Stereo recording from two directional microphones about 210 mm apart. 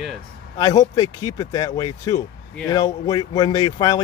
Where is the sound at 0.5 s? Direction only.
20° left (ahead or behind).